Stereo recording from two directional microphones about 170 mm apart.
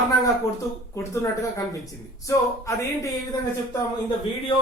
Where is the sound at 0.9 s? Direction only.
20° left (ahead or behind).